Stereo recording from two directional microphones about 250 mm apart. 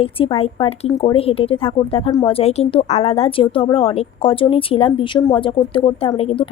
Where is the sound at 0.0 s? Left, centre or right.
Left.